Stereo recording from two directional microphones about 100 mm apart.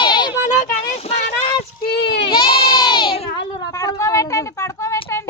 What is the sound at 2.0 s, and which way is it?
Baby cry, 55° left (ahead or behind).